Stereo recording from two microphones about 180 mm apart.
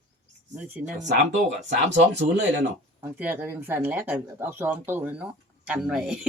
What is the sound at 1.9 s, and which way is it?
Speech, 75° right (ahead or behind).